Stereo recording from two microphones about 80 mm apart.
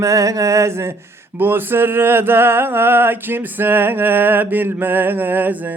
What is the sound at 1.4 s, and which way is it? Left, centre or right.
Male singing, right.